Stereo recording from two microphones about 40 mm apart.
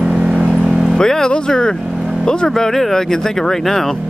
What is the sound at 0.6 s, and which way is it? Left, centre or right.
Vehicle, centre.